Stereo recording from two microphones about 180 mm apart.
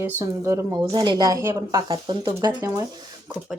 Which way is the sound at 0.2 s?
15° right (ahead or behind).